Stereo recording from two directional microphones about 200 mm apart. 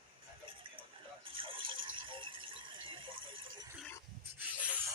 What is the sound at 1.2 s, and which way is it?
Rattle, 25° right (ahead or behind).